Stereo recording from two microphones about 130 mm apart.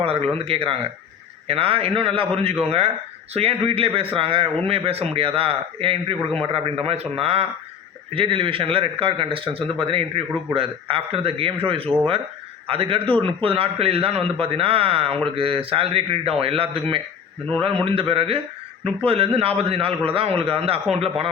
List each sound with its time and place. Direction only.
0.0 s a man's voice: 50° right (ahead or behind)